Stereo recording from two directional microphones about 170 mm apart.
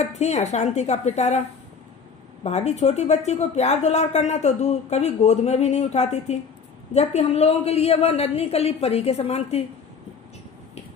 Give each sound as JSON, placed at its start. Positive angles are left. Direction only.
{"t": 0.0, "sound": "speech", "side_deg": 40}
{"t": 2.4, "sound": "speech", "side_deg": 40}